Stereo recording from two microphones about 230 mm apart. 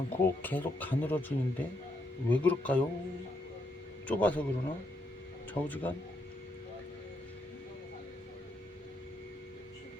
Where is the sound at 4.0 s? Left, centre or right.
Centre.